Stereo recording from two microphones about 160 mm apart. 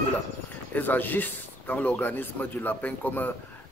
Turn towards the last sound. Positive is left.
turn(degrees=10)  # may be behind; listen again after turning